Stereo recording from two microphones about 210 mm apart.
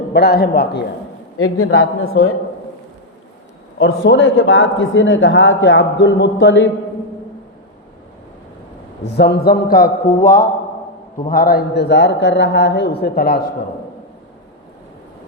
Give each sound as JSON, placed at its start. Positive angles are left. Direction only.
{"t": 0.1, "sound": "a man's voice", "side_deg": 50}
{"t": 1.4, "sound": "a woman's voice", "side_deg": 90}
{"t": 3.8, "sound": "a man's voice", "side_deg": 60}
{"t": 9.0, "sound": "a man's voice", "side_deg": 50}